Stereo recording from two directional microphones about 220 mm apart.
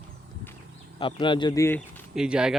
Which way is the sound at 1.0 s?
20° left (ahead or behind).